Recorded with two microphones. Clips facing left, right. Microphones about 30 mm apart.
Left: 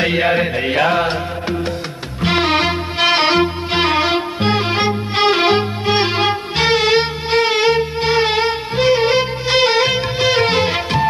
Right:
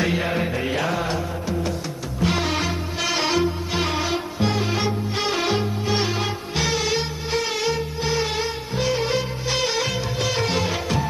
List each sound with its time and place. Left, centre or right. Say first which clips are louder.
0.0 s music: left 7 dB; left